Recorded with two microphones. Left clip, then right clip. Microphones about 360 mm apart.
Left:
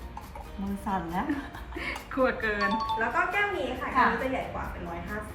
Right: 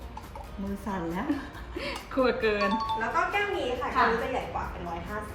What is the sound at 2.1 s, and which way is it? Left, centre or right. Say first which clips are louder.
Speech: right 2 dB; centre.